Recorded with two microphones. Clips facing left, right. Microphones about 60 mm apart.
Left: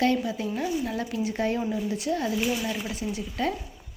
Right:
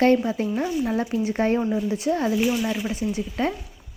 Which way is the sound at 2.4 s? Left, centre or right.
Centre.